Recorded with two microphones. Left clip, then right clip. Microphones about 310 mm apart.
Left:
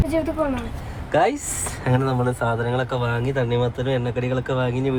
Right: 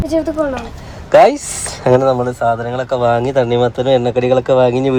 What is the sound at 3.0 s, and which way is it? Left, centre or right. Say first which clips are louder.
Speech: right 11 dB; right.